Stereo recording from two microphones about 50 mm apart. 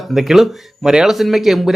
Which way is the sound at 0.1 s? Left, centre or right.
Centre.